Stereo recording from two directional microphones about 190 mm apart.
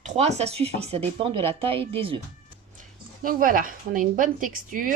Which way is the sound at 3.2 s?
45° right (ahead or behind).